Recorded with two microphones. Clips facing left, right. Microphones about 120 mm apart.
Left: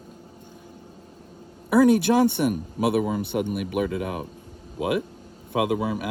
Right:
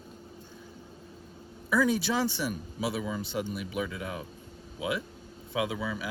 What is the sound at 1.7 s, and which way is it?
Speech, 55° left (ahead or behind).